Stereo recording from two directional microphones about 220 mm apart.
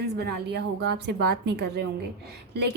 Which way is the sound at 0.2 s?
45° right (ahead or behind).